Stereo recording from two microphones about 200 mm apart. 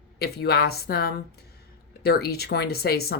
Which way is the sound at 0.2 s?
50° left (ahead or behind).